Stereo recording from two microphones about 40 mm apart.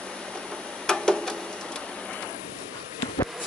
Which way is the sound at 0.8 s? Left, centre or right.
Centre.